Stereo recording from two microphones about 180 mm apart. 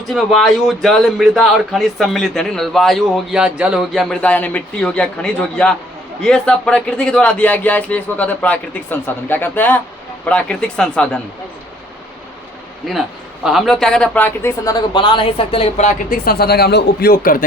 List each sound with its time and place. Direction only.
0.1 s a man's voice: centre (ahead or behind)
12.9 s a man's voice: centre (ahead or behind); by 15.9 s 30° left (ahead or behind)
16.0 s speech: 50° left (ahead or behind)